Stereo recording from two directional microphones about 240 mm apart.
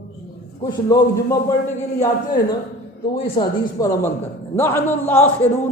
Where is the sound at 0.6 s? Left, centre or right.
Centre.